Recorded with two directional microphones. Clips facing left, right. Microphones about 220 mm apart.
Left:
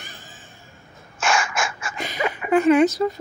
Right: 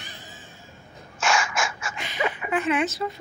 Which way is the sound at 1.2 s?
55° left (ahead or behind).